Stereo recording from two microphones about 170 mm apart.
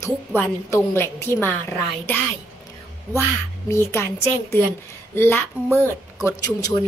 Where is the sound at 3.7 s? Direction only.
15° left (ahead or behind).